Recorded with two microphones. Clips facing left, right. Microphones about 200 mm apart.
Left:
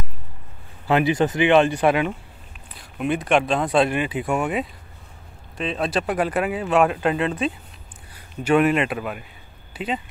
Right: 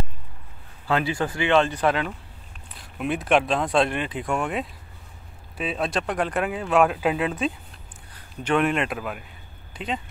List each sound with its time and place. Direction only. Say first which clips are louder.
0.8 s speech: left 5 dB; 15° left (ahead or behind)
2.8 s speech: left 3 dB; centre (ahead or behind)